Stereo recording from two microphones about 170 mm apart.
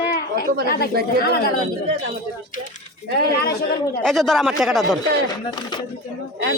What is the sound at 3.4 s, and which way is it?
Speech, 70° left (ahead or behind).